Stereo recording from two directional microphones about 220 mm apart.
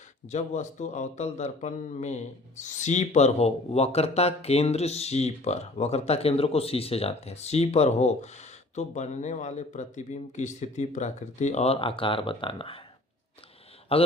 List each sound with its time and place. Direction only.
0.3 s speech: 30° left (ahead or behind)
13.9 s speech: 25° left (ahead or behind)